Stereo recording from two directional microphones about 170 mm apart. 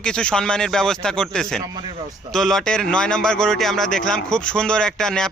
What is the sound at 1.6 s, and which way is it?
Speech, 25° right (ahead or behind).